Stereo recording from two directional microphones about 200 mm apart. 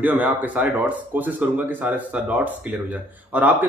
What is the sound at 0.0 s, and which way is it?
Speech, 10° right (ahead or behind).